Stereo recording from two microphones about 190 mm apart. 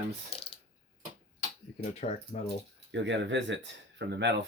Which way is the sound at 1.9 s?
35° left (ahead or behind).